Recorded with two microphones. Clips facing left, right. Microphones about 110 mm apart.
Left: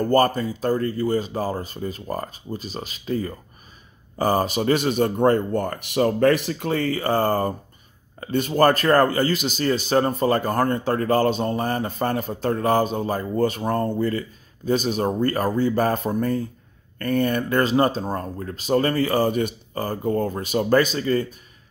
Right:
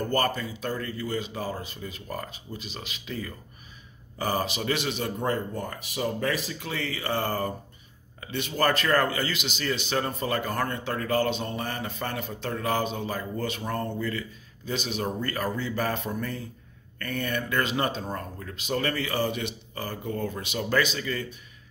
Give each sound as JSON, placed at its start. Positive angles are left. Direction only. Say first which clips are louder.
{"t": 0.0, "sound": "a man's voice", "louder": "left 8 dB", "side_deg": 40}